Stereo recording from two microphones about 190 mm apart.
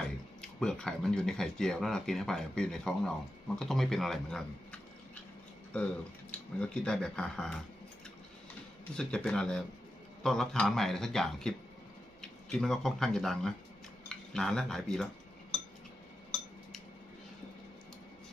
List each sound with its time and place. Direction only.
0.6 s speech: 5° left (ahead or behind)
6.6 s speech: 5° left (ahead or behind)
9.0 s speech: 5° left (ahead or behind)